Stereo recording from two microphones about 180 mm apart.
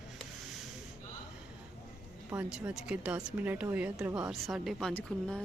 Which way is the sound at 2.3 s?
5° right (ahead or behind).